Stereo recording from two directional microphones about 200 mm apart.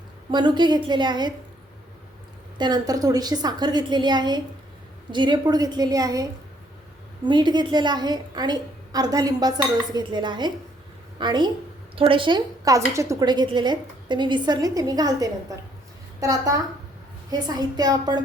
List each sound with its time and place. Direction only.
0.3 s a woman's voice: 20° right (ahead or behind)
2.6 s a woman's voice: 20° right (ahead or behind)
7.3 s a woman's voice: 20° right (ahead or behind)